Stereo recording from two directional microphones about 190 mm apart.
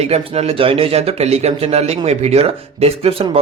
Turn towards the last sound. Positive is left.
turn(degrees=-30)  # may be behind; listen again after turning